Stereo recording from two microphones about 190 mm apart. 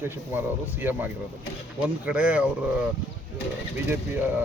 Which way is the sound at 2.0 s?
5° right (ahead or behind).